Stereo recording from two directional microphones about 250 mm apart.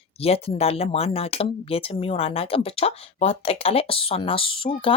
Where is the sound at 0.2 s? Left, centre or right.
Left.